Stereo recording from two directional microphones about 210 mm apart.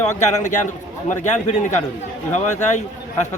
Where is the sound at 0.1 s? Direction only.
35° left (ahead or behind).